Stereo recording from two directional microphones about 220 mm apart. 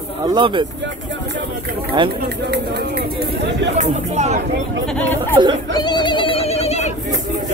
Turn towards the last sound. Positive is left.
turn(degrees=30)  # may be behind; listen again after turning